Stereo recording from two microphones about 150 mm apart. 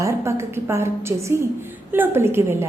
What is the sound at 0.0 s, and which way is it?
A woman's voice, 20° right (ahead or behind).